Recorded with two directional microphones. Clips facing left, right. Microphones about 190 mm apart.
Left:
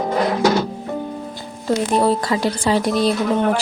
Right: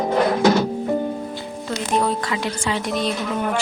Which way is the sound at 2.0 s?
35° left (ahead or behind).